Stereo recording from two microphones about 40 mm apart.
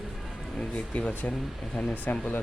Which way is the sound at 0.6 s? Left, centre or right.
Left.